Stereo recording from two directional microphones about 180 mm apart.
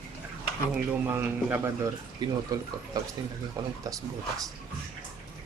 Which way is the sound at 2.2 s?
20° right (ahead or behind).